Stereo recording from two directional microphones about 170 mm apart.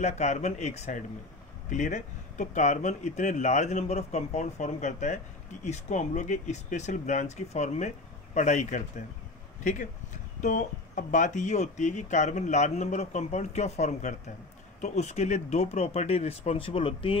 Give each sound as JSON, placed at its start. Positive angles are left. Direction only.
{"t": 0.0, "sound": "speech", "side_deg": 40}